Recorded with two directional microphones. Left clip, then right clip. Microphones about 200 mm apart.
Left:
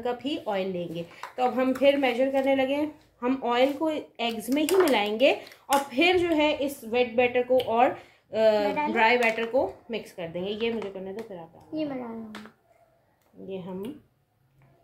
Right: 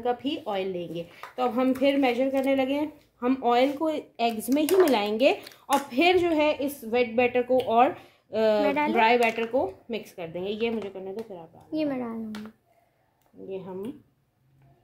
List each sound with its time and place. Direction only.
0.0 s speech: 30° right (ahead or behind)
8.6 s speech: 55° right (ahead or behind)
8.9 s speech: 35° right (ahead or behind)
11.7 s speech: 55° right (ahead or behind)